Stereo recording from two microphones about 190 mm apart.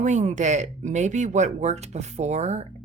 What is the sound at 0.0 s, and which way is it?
Speech, 40° right (ahead or behind).